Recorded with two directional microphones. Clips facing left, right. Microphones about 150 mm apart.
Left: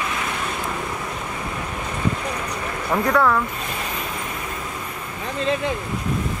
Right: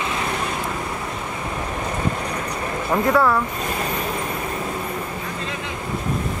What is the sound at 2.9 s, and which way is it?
Speech, 5° right (ahead or behind).